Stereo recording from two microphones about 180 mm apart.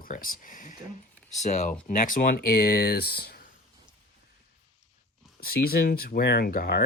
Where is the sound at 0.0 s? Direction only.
50° left (ahead or behind).